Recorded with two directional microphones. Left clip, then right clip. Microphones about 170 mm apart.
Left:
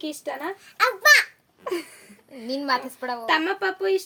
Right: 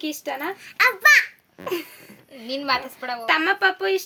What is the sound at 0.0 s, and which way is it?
Speech, 15° right (ahead or behind).